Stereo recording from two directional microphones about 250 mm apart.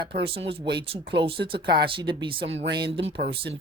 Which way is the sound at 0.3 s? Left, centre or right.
Right.